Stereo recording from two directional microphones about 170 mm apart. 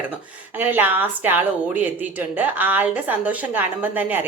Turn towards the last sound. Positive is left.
turn(degrees=-10)  # may be behind; listen again after turning